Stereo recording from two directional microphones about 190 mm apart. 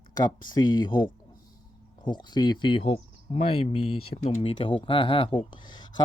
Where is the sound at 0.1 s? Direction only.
20° left (ahead or behind).